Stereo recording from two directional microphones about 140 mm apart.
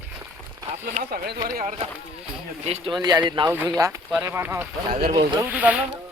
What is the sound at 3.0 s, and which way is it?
Speech, 30° right (ahead or behind).